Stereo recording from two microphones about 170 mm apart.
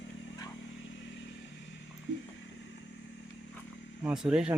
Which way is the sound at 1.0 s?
90° left.